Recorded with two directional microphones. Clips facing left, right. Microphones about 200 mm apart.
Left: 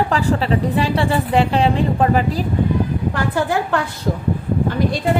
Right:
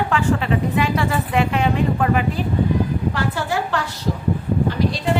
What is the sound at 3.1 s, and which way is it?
Speech, 50° left (ahead or behind).